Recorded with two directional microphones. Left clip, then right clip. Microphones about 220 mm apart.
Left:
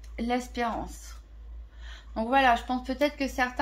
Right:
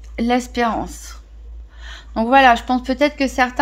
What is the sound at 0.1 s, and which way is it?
Speech, 40° right (ahead or behind).